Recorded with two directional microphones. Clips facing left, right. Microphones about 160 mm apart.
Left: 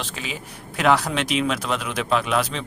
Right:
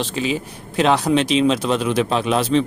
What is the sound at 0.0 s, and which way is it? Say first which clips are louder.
A man's voice: right 10 dB; 30° right (ahead or behind).